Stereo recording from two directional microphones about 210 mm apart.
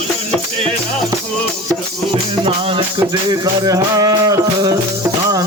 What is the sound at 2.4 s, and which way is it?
Music, 25° right (ahead or behind).